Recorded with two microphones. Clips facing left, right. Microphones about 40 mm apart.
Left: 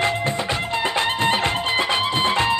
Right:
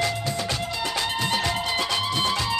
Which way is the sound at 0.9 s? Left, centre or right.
Left.